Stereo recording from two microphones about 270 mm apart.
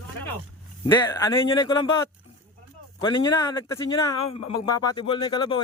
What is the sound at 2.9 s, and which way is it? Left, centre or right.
Speech, centre.